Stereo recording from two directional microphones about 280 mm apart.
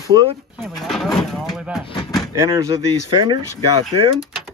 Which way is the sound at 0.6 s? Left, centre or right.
Centre.